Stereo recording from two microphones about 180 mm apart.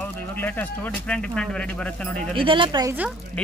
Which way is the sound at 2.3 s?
30° right (ahead or behind).